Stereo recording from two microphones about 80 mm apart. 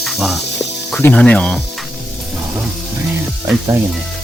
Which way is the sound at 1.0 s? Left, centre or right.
Centre.